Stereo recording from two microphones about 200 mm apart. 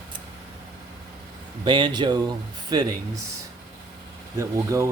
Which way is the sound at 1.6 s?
25° right (ahead or behind).